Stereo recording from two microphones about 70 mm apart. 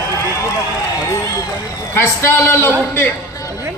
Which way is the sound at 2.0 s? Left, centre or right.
Left.